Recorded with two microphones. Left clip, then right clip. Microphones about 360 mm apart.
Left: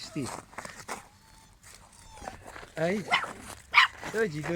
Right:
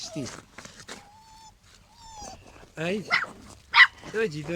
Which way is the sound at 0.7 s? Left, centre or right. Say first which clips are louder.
Left 3 dB; centre.